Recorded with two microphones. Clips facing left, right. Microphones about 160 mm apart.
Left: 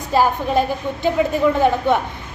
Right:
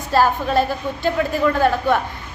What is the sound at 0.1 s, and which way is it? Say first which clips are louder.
A woman's voice: even; 15° left (ahead or behind).